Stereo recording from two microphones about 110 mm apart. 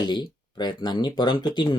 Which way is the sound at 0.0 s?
40° left (ahead or behind).